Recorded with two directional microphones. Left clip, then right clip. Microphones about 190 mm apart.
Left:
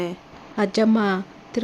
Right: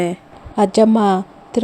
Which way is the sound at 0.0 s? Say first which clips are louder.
Right 8 dB; 15° right (ahead or behind).